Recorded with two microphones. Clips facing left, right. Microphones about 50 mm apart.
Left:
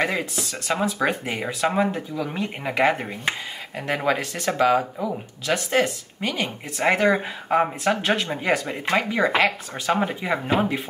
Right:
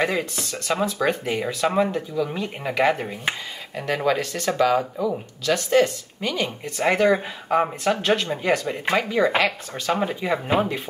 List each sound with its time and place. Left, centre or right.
0.4 s speech: centre